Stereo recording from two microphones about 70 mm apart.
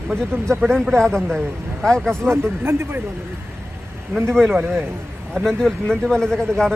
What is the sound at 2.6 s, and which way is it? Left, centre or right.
Speech, right.